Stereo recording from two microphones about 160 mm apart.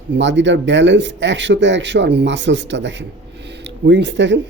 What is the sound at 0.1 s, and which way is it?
Speech, 90° right.